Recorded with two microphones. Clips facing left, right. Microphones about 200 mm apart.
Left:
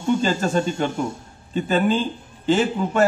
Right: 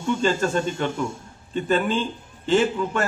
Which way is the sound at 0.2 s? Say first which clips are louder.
Left 1 dB; 40° left (ahead or behind).